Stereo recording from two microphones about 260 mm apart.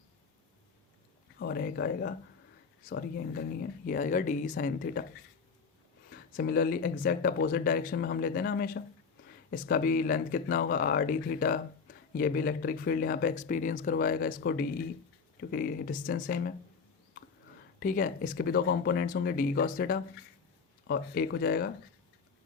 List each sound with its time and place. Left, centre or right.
1.4 s speech: left
6.1 s speech: left
17.7 s speech: left